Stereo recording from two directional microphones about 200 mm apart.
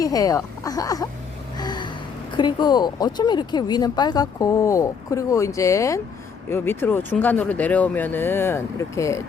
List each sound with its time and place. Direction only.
0.0 s speech: 15° left (ahead or behind)
1.5 s a sound: 20° left (ahead or behind)
2.3 s speech: 20° left (ahead or behind)